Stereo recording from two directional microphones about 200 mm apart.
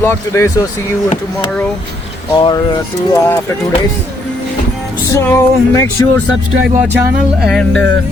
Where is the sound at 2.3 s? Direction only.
20° left (ahead or behind).